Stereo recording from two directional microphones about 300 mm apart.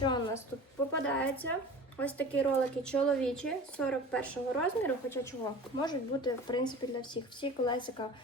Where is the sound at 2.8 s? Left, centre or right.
Centre.